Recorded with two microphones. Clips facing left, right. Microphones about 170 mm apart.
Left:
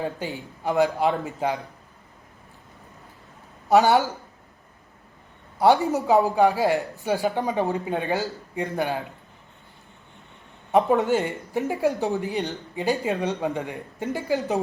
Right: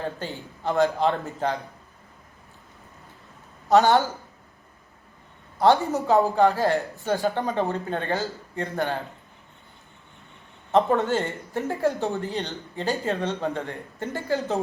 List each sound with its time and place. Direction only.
0.0 s speech: 15° left (ahead or behind)
3.7 s speech: 15° left (ahead or behind)
5.5 s speech: 15° left (ahead or behind)
10.7 s speech: 10° left (ahead or behind)